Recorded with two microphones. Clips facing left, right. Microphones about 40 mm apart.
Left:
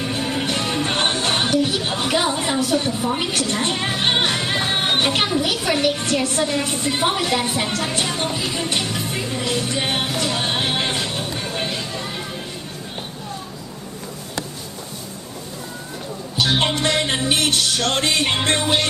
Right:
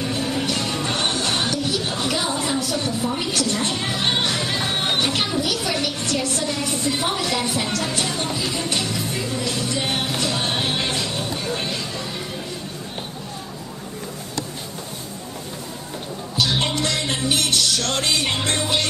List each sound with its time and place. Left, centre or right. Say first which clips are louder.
0.0 s music: left 1 dB; left
5.4 s a woman's voice: left 3 dB; left
8.6 s music: left 1 dB; left
10.2 s music: left 1 dB; centre
11.5 s a sound: left 1 dB; centre
16.3 s a woman's voice: left 2 dB; left